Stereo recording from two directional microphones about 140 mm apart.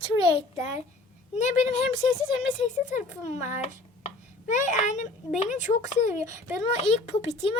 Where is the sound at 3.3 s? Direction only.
50° left (ahead or behind).